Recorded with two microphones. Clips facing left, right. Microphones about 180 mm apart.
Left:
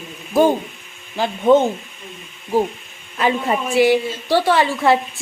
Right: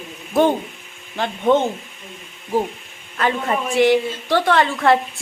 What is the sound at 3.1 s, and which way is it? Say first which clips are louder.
A woman's voice: left 2 dB; 10° left (ahead or behind).